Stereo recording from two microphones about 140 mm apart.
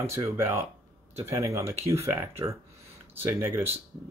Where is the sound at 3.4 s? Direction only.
15° right (ahead or behind).